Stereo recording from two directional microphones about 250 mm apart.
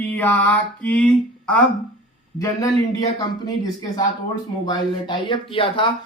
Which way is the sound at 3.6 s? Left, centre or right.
Centre.